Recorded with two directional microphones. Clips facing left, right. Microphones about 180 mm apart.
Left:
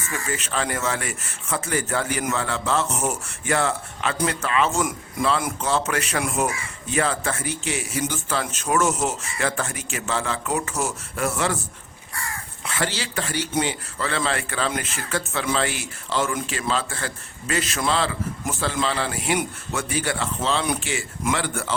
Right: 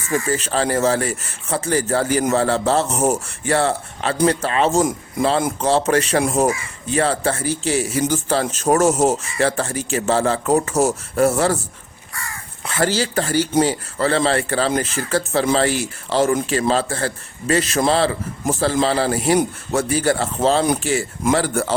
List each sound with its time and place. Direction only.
0.1 s a man's voice: 35° right (ahead or behind)
12.6 s a man's voice: 40° right (ahead or behind)